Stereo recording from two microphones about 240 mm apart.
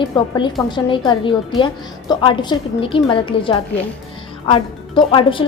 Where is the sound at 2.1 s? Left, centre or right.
Centre.